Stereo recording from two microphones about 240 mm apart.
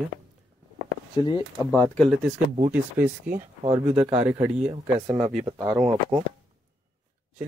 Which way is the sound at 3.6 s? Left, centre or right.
Right.